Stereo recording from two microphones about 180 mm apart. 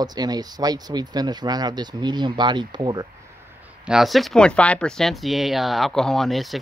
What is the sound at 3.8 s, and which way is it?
Speech, centre (ahead or behind).